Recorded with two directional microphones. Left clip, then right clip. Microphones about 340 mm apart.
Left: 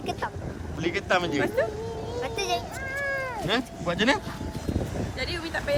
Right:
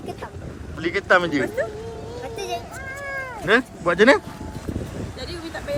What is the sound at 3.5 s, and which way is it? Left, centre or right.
Speech, centre.